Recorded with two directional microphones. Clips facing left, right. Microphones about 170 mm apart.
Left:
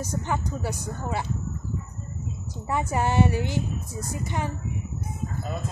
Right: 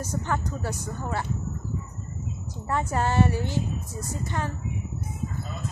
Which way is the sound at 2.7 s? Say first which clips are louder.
Left 1 dB; 15° left (ahead or behind).